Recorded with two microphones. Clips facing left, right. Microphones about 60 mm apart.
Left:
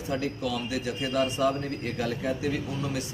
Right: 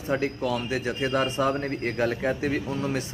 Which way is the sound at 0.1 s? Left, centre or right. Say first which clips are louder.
Right 4 dB; right.